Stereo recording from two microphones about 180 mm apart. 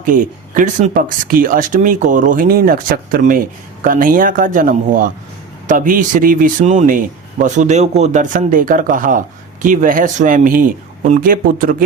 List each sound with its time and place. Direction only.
0.0 s a man's voice: 45° right (ahead or behind)